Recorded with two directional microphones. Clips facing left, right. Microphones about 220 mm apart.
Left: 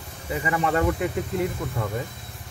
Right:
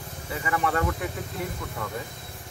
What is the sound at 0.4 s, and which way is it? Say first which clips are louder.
Speech: left 3 dB; 20° left (ahead or behind).